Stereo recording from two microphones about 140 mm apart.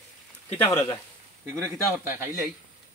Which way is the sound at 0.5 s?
20° left (ahead or behind).